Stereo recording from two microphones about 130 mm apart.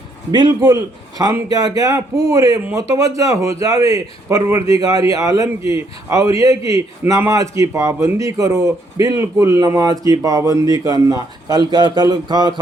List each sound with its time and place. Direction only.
0.3 s a man's voice: 30° right (ahead or behind)